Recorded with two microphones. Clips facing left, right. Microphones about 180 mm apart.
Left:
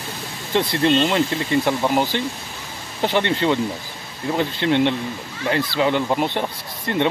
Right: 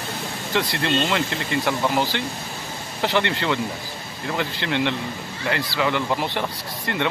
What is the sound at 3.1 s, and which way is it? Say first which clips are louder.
Speech: left 3 dB; 20° left (ahead or behind).